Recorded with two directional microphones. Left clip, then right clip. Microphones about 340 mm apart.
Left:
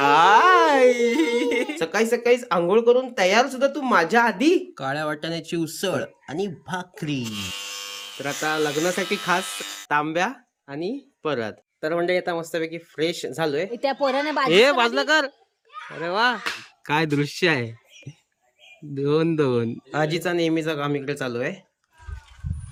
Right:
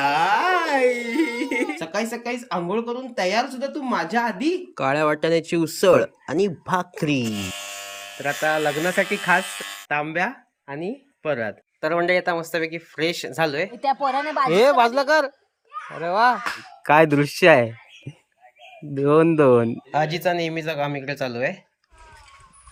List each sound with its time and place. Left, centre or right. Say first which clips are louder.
0.0 s a sound: left 5 dB; centre
1.6 s speech: left 3 dB; centre
4.7 s speech: right 6 dB; centre
11.8 s speech: right 2 dB; centre
15.0 s speech: right 1 dB; centre
16.8 s speech: right 7 dB; centre
18.9 s speech: right 5 dB; centre
19.9 s speech: right 1 dB; centre